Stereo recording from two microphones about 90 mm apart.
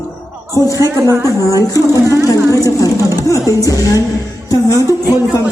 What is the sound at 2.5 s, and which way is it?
A woman's voice, 40° left (ahead or behind).